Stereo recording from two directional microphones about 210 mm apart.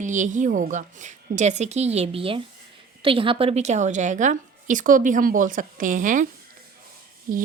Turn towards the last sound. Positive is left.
turn(degrees=-40)  # may be behind; listen again after turning